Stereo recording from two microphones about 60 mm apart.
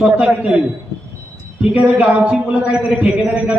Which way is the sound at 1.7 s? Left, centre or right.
Right.